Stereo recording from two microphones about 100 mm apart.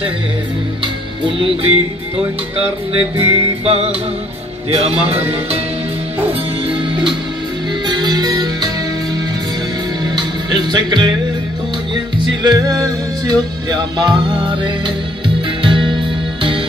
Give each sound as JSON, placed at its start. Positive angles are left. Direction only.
{"t": 1.2, "sound": "music", "side_deg": -60}
{"t": 3.3, "sound": "music", "side_deg": -90}
{"t": 6.7, "sound": "music", "side_deg": -55}
{"t": 10.1, "sound": "music", "side_deg": -50}
{"t": 12.5, "sound": "music", "side_deg": -40}